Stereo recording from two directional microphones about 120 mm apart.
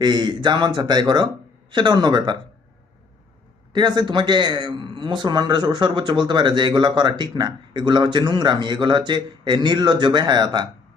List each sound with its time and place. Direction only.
0.0 s a man's voice: 35° right (ahead or behind)
3.7 s a man's voice: 40° right (ahead or behind)